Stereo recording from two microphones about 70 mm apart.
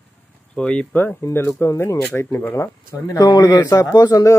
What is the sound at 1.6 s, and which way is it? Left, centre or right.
Speech, left.